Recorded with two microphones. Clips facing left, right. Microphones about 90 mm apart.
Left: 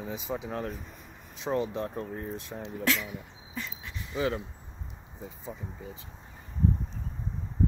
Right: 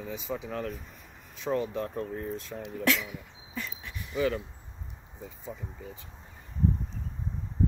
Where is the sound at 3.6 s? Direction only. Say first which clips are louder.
Even; 20° left (ahead or behind).